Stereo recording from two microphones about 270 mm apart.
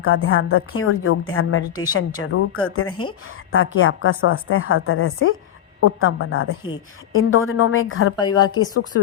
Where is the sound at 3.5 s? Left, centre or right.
Left.